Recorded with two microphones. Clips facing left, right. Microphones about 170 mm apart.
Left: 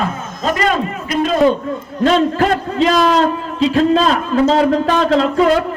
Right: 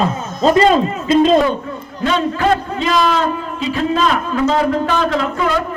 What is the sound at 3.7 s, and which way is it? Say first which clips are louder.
A man's voice: left 3 dB; 35° left (ahead or behind).